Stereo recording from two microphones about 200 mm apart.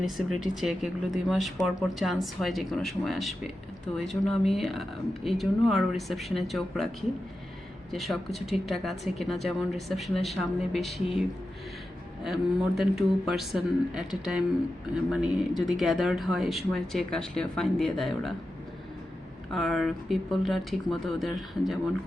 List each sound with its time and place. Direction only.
0.5 s speech: centre (ahead or behind)
19.5 s speech: centre (ahead or behind)